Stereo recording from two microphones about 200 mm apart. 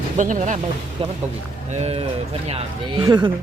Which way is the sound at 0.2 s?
40° right (ahead or behind).